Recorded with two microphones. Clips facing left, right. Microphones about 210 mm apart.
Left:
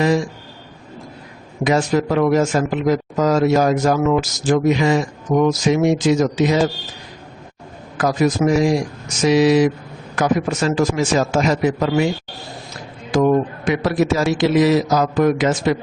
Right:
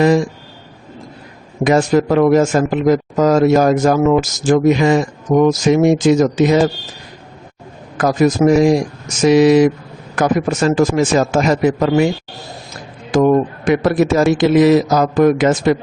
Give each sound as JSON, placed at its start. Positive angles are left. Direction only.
{"t": 1.6, "sound": "speech", "side_deg": -50}
{"t": 7.9, "sound": "speech", "side_deg": -50}
{"t": 13.1, "sound": "speech", "side_deg": -50}